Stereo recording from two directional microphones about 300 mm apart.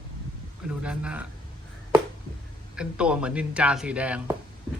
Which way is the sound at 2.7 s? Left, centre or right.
Centre.